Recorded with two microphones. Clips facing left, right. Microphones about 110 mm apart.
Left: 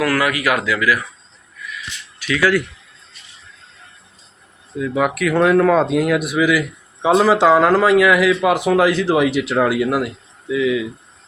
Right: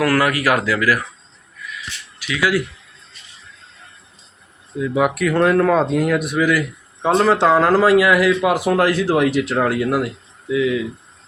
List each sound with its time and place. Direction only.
0.0 s speech: 35° right (ahead or behind)
2.2 s speech: 10° right (ahead or behind)
4.8 s speech: 5° right (ahead or behind)